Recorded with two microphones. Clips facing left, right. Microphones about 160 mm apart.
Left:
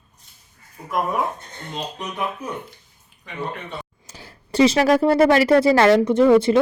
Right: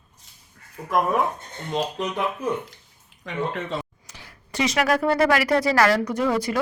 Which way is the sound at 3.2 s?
90° right.